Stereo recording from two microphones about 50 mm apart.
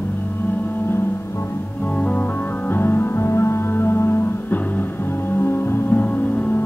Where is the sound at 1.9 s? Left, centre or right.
Left.